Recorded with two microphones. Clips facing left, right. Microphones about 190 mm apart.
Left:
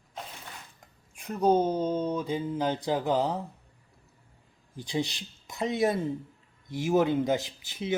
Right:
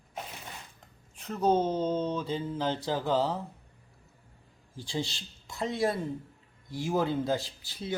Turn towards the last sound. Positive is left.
turn(degrees=20)  # may be behind; listen again after turning